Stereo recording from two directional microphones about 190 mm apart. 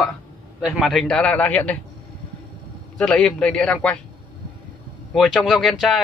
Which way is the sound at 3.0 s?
5° left (ahead or behind).